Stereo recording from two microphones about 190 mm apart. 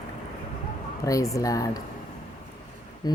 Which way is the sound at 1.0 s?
15° left (ahead or behind).